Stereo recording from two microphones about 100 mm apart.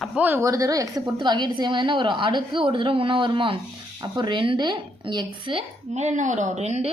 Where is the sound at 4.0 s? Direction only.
45° right (ahead or behind).